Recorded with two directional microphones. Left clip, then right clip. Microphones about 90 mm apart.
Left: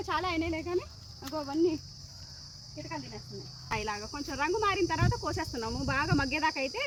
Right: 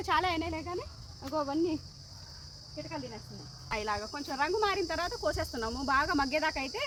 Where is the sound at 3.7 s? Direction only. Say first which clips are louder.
Right 1 dB; 10° right (ahead or behind).